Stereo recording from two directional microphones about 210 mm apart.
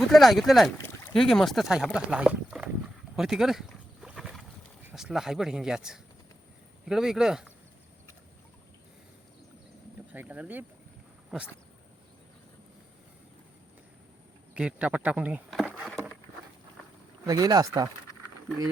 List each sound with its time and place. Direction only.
0.1 s speech: centre (ahead or behind)
10.1 s speech: 5° right (ahead or behind)
14.5 s a sound: 5° right (ahead or behind)
17.2 s speech: 15° right (ahead or behind)